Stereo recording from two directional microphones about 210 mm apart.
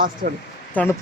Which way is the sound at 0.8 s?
5° left (ahead or behind).